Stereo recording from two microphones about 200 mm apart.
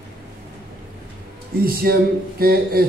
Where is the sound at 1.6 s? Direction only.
50° right (ahead or behind).